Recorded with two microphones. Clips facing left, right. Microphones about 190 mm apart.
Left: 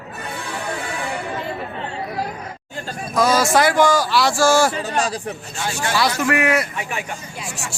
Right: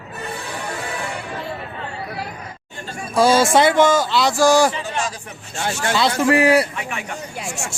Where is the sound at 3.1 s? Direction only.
30° right (ahead or behind).